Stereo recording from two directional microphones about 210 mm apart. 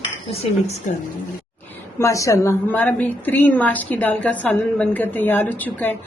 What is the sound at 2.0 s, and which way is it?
A woman's voice, 15° left (ahead or behind).